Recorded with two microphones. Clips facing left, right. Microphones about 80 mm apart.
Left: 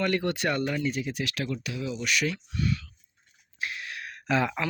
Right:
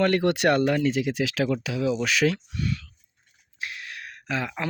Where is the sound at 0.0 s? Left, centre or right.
Right.